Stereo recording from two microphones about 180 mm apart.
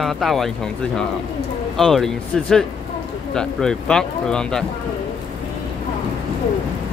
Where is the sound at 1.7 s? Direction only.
Centre (ahead or behind).